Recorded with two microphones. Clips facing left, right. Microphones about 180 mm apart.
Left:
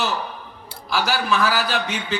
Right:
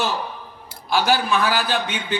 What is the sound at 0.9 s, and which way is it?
Speech, 25° right (ahead or behind).